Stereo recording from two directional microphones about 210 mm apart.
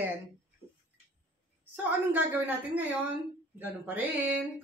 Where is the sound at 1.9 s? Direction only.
10° right (ahead or behind).